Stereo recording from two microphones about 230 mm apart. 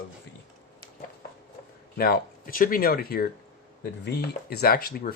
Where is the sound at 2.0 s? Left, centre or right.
Left.